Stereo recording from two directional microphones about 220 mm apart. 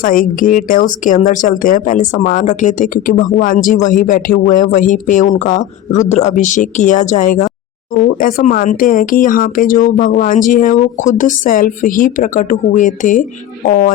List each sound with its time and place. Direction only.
0.0 s speech: 40° left (ahead or behind)